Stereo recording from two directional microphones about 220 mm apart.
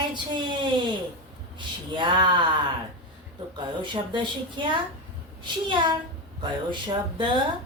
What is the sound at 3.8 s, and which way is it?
A woman's voice, 20° right (ahead or behind).